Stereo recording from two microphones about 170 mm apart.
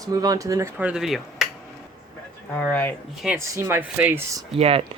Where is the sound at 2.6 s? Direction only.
10° left (ahead or behind).